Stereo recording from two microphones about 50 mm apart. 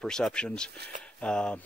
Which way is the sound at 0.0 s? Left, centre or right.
Centre.